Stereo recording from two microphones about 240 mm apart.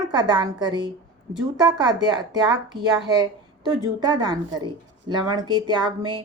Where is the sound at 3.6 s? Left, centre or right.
Centre.